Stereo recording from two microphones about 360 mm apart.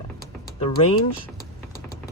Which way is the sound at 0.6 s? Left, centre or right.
Centre.